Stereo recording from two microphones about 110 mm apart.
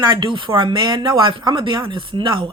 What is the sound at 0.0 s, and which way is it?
Speech, 45° right (ahead or behind).